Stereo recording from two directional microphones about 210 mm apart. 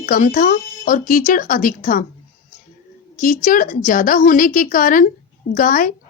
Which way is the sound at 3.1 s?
40° left (ahead or behind).